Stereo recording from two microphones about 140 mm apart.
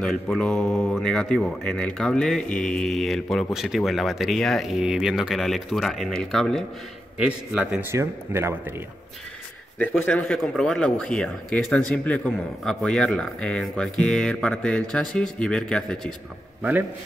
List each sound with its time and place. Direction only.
0.0 s speech: centre (ahead or behind)
7.2 s speech: 5° right (ahead or behind)
7.9 s speech: 20° right (ahead or behind)
9.8 s a man's voice: 10° left (ahead or behind)